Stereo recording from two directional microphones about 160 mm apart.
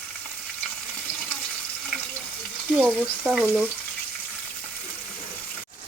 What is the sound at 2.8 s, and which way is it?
Stir, 5° right (ahead or behind).